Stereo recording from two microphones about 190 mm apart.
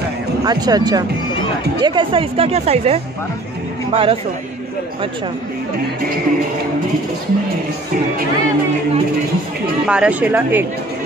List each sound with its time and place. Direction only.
0.5 s speech: 20° right (ahead or behind)
9.8 s speech: 5° right (ahead or behind)